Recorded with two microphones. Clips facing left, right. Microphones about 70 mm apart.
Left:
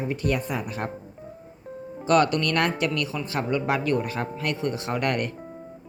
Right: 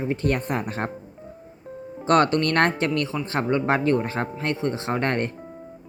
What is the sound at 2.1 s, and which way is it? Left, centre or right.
Speech, right.